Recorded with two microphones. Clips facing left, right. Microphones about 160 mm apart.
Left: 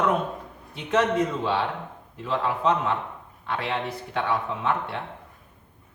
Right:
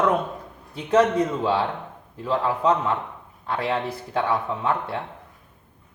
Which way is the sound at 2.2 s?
35° right (ahead or behind).